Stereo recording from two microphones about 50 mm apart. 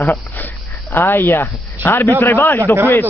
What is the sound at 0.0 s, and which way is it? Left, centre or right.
A man's voice, left.